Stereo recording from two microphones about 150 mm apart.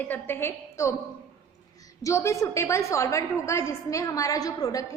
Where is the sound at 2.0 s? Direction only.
20° left (ahead or behind).